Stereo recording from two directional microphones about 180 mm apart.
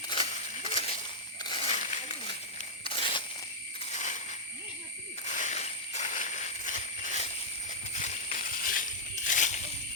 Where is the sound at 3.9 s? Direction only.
40° left (ahead or behind).